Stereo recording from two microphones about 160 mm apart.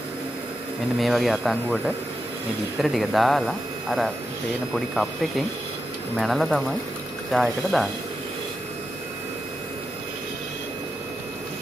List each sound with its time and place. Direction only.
0.9 s speech: centre (ahead or behind)
6.1 s speech: centre (ahead or behind)